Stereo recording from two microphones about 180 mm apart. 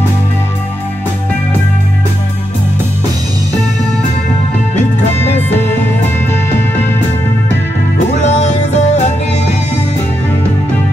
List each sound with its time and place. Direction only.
8.3 s music: 40° left (ahead or behind)